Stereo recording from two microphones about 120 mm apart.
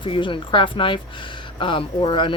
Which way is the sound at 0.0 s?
45° left (ahead or behind).